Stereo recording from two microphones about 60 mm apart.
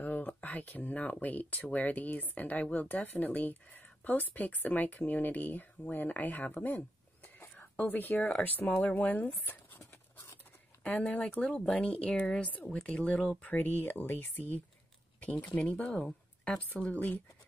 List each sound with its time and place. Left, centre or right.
0.0 s a sound: left
1.2 s speech: left
10.8 s speech: left